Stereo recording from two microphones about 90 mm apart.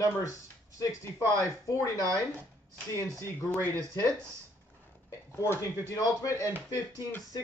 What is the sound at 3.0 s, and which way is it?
Speech, 35° left (ahead or behind).